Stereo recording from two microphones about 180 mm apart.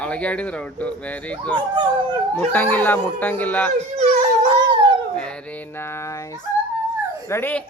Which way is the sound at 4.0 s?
35° right (ahead or behind).